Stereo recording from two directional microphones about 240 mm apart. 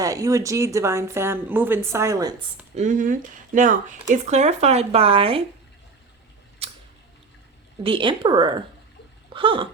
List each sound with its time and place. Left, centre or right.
0.0 s speech: centre
2.7 s speech: right
7.9 s speech: right
9.3 s a sound: right